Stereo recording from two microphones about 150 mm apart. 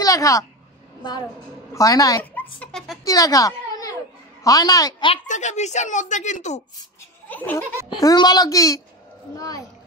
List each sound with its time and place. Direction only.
0.0 s a woman's voice: 20° left (ahead or behind)
1.7 s a child's voice: 25° left (ahead or behind)
2.3 s speech: 5° left (ahead or behind)
3.1 s a child's voice: 25° left (ahead or behind)
5.1 s speech: 50° left (ahead or behind)
7.2 s laughter: 10° left (ahead or behind)
8.0 s a child's voice: 25° left (ahead or behind)